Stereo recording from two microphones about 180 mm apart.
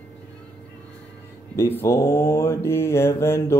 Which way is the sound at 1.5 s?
15° left (ahead or behind).